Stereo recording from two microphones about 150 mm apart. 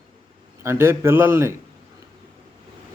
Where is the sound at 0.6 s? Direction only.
15° right (ahead or behind).